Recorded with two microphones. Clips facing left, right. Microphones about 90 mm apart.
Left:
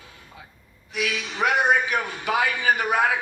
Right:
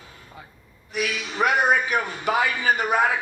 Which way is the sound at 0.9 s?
55° right (ahead or behind).